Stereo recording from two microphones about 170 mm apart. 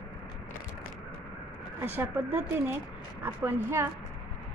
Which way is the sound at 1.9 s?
10° right (ahead or behind).